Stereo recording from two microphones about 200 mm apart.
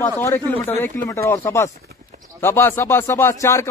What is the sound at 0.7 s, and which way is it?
Speech, 10° left (ahead or behind).